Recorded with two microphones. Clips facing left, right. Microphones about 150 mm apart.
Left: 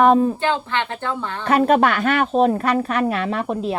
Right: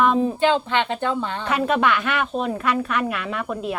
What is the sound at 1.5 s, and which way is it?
Speech, 45° left (ahead or behind).